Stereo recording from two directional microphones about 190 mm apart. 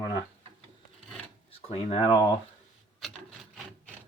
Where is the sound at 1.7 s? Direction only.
30° left (ahead or behind).